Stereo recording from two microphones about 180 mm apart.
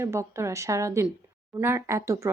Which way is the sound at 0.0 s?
15° right (ahead or behind).